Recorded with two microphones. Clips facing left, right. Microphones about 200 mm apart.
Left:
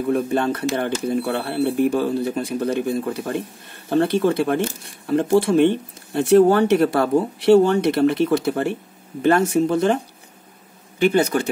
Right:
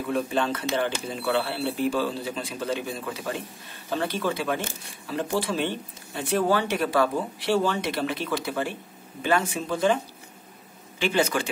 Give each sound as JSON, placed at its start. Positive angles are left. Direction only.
{"t": 0.0, "sound": "speech", "side_deg": 50}